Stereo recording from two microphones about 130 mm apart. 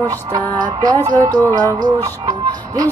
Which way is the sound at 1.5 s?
30° right (ahead or behind).